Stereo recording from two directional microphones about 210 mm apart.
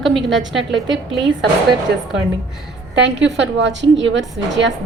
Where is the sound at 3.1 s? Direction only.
60° right (ahead or behind).